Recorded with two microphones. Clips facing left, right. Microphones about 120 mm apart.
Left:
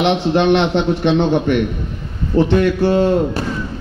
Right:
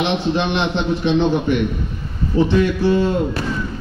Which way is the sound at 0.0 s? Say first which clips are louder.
Left 5 dB; 60° left (ahead or behind).